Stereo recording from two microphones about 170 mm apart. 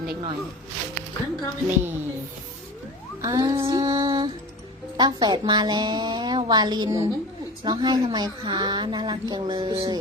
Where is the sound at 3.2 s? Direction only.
20° right (ahead or behind).